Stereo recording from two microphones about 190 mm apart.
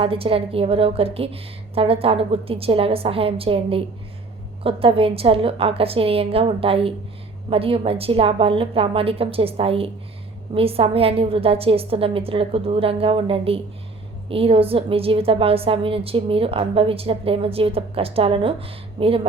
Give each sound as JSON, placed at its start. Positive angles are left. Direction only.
{"t": 0.0, "sound": "a woman's voice", "side_deg": -30}